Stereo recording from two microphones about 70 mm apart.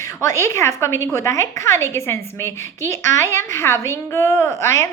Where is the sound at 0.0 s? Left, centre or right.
Left.